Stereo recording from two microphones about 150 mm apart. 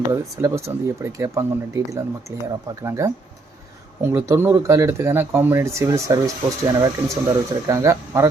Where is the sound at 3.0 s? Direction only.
20° right (ahead or behind).